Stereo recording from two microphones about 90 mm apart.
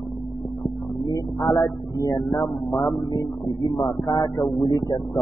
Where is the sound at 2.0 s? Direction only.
40° left (ahead or behind).